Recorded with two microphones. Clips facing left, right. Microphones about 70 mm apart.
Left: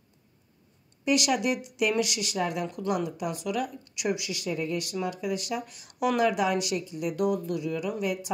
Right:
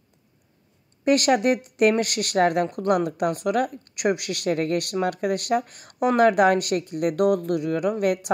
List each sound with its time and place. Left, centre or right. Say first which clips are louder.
1.0 s speech: right 6 dB; right